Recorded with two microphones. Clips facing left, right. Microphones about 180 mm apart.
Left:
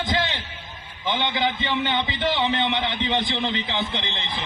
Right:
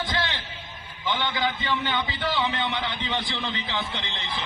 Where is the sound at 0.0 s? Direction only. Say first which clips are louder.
Left 4 dB; 15° left (ahead or behind).